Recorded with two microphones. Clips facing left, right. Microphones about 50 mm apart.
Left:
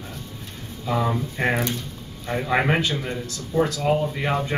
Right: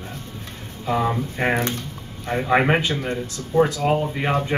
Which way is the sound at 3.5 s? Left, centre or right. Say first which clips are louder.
Right 4 dB; right.